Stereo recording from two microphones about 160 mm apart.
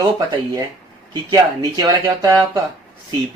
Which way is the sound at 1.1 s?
25° right (ahead or behind).